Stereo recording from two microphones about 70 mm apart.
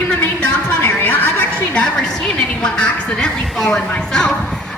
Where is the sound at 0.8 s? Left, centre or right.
Left.